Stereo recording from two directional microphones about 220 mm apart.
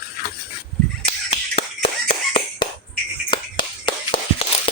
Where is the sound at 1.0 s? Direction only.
25° left (ahead or behind).